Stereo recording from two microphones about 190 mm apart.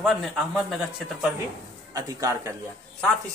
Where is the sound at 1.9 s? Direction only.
20° right (ahead or behind).